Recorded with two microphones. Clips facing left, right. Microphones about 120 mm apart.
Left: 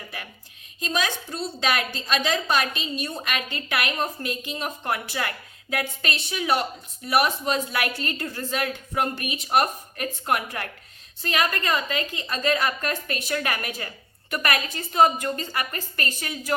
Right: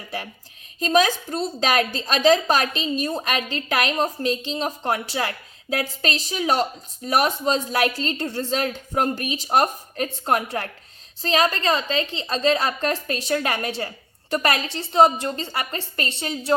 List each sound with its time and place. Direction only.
0.8 s a woman's voice: 40° right (ahead or behind)